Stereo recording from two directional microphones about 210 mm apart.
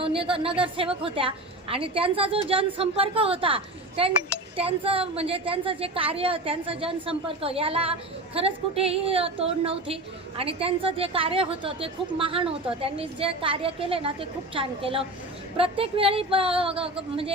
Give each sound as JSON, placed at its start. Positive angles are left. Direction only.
{"t": 0.0, "sound": "a woman's voice", "side_deg": -25}